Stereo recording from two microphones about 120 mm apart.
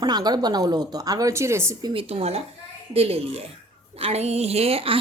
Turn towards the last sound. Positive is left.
turn(degrees=-55)  # may be behind; listen again after turning